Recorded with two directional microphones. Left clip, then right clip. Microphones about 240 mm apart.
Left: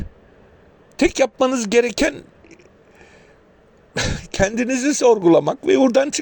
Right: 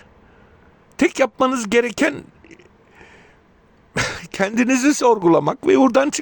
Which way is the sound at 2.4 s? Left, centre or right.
Centre.